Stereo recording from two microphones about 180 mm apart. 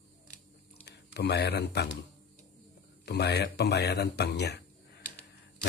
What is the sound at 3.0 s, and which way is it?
A man's voice, 65° left (ahead or behind).